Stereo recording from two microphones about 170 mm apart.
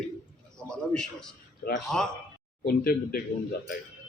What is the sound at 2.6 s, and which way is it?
Speech, 60° left (ahead or behind).